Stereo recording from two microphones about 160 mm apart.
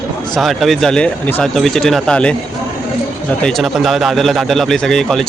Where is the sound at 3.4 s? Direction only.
Centre (ahead or behind).